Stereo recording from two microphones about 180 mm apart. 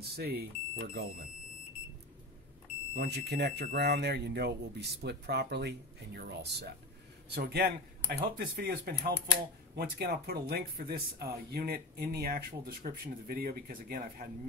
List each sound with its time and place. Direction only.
0.1 s speech: 60° right (ahead or behind)
2.9 s speech: 65° right (ahead or behind)